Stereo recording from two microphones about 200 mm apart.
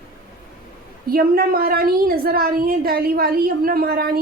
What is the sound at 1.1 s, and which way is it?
A woman's voice, 45° right (ahead or behind).